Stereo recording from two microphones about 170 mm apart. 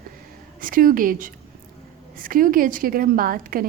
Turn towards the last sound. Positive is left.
turn(degrees=-55)  # may be behind; listen again after turning